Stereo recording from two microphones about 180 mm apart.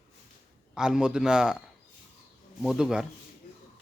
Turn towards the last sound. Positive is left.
turn(degrees=0)  # may be behind; listen again after turning